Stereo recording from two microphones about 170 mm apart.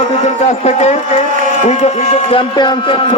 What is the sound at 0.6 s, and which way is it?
A man's voice, 40° left (ahead or behind).